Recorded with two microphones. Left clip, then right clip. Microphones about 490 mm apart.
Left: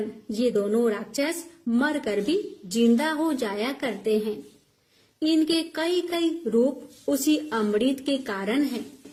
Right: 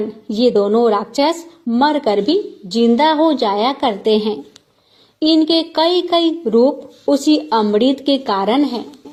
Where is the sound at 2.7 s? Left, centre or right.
Centre.